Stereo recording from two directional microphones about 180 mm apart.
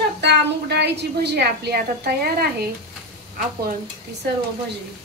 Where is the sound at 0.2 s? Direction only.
70° right (ahead or behind).